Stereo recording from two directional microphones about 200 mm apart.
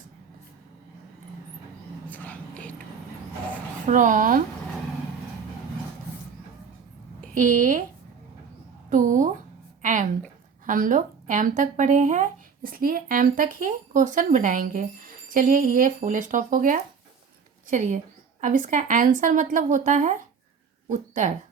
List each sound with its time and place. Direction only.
2.0 s whispering: 10° left (ahead or behind)
3.8 s speech: 40° right (ahead or behind)
7.3 s speech: 40° right (ahead or behind)
8.9 s speech: 40° right (ahead or behind)
9.8 s a sound: 40° right (ahead or behind)
10.7 s speech: 40° right (ahead or behind)